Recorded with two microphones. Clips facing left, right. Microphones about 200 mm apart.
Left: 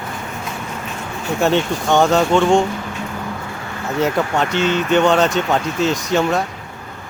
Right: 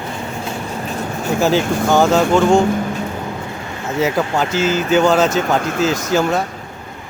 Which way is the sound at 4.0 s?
Centre (ahead or behind).